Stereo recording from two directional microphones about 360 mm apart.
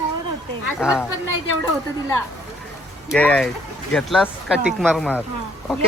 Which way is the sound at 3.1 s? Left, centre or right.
Centre.